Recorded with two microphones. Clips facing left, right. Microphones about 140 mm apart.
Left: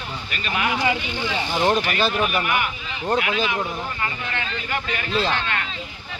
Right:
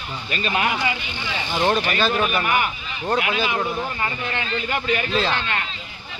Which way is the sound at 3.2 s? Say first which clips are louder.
Right 1 dB; 20° right (ahead or behind).